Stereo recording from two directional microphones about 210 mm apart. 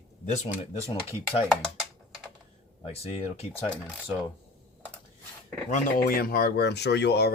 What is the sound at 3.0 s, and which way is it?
Speech, 30° left (ahead or behind).